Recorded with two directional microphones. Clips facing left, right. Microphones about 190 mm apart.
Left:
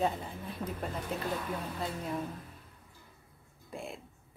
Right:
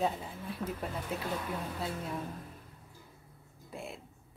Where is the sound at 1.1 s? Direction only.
5° right (ahead or behind).